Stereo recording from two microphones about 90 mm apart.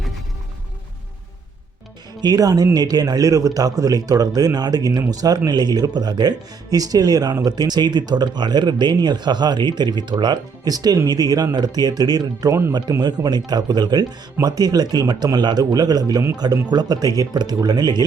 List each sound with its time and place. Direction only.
2.2 s speech: 45° right (ahead or behind)